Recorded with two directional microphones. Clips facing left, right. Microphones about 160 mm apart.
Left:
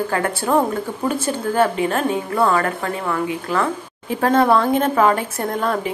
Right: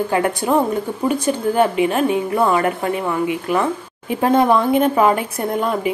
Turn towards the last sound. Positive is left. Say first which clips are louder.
# right 2 dB
turn(degrees=-10)  # may be behind; listen again after turning